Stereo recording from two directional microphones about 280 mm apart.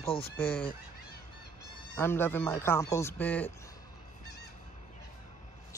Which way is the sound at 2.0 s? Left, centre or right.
Centre.